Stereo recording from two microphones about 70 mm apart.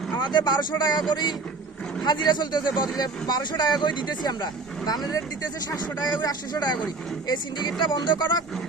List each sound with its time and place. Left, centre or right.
0.2 s speech: left
7.8 s speech: left